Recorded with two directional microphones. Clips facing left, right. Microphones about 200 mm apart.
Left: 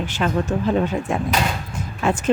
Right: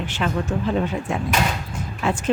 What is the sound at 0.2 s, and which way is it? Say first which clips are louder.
Speech: left 2 dB; 45° left (ahead or behind).